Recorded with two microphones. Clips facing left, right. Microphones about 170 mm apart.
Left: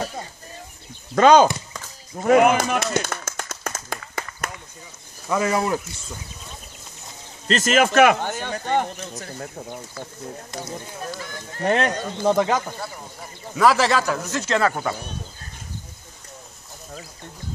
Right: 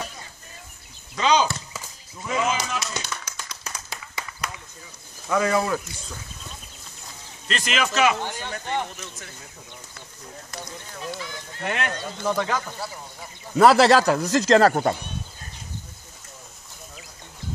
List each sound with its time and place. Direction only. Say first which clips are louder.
1.1 s speech: left 8 dB; 50° left (ahead or behind)
2.1 s a sound: left 10 dB; 60° left (ahead or behind)
5.3 s speech: left 1 dB; 25° left (ahead or behind)
7.4 s speech: left 8 dB; 45° left (ahead or behind)
9.0 s speech: left 6 dB; 40° left (ahead or behind)
9.4 s speech: left 12 dB; 55° left (ahead or behind)
11.1 s speech: left 3 dB; 45° left (ahead or behind)
12.3 s speech: left 6 dB; 25° left (ahead or behind)
13.6 s speech: right 3 dB; 30° right (ahead or behind)